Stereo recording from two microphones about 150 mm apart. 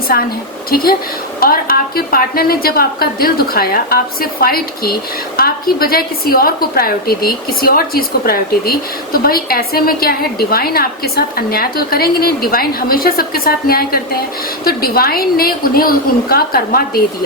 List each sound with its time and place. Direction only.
0.1 s a woman's voice: 90° left